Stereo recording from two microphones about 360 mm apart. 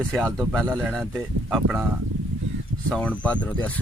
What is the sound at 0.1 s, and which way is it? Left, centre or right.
Speech, centre.